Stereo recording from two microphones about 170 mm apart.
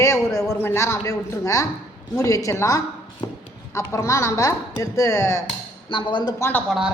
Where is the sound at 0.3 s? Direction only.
15° left (ahead or behind).